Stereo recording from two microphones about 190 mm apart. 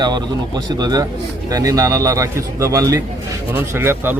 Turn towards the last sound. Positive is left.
turn(degrees=-10)  # may be behind; listen again after turning